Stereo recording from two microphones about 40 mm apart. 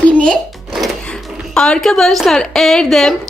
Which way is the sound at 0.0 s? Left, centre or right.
Left.